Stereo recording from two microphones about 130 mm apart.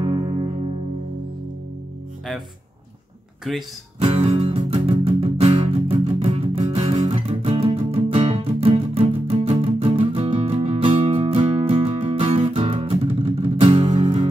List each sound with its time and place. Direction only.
0.0 s music: 40° right (ahead or behind)
3.5 s speech: centre (ahead or behind)
4.0 s music: 50° right (ahead or behind)